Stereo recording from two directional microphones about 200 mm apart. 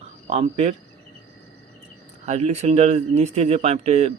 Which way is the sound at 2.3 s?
30° right (ahead or behind).